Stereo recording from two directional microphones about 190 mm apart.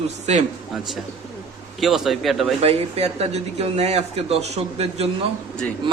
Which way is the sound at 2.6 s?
30° right (ahead or behind).